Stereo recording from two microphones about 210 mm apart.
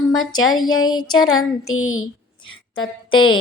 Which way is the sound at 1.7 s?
75° left (ahead or behind).